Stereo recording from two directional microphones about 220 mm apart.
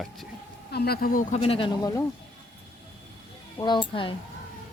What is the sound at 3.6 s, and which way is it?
Speech, 20° left (ahead or behind).